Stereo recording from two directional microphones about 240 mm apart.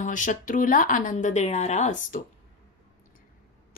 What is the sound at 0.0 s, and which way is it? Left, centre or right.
A woman's voice, left.